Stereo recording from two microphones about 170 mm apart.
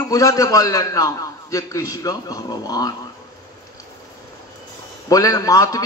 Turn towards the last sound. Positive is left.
turn(degrees=20)  # may be behind; listen again after turning